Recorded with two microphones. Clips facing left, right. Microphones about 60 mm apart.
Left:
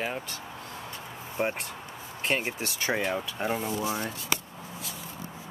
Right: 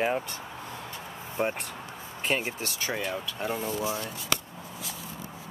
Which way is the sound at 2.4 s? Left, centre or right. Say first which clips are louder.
Left 1 dB; left.